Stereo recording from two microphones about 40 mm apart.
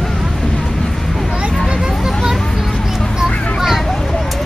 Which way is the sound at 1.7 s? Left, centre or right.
Centre.